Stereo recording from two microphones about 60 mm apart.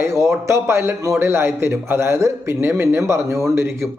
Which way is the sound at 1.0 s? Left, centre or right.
Right.